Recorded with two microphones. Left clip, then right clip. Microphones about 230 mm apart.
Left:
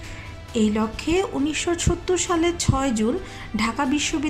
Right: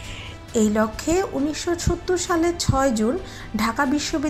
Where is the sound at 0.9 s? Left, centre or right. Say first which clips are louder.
Right 1 dB; left.